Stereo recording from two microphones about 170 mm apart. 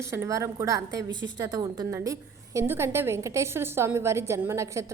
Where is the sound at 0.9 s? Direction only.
90° right.